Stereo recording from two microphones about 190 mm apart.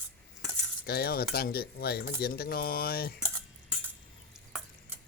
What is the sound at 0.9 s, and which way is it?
Speech, 55° left (ahead or behind).